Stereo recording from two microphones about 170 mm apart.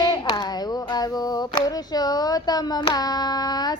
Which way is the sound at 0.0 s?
25° left (ahead or behind).